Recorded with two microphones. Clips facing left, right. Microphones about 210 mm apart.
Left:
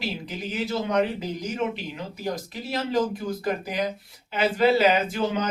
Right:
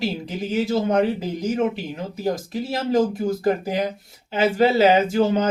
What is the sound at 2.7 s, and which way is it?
Speech, 45° right (ahead or behind).